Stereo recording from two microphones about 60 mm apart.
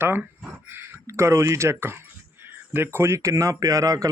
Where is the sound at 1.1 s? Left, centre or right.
Right.